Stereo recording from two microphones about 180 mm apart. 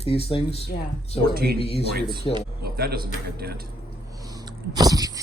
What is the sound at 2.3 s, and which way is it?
Speech, 25° left (ahead or behind).